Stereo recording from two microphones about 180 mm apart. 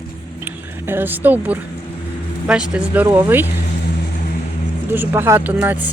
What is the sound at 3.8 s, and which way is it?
Vehicle, 50° left (ahead or behind).